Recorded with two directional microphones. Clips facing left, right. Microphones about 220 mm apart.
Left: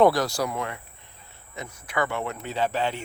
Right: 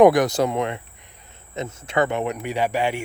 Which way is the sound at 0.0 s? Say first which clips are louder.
Right 6 dB; 15° right (ahead or behind).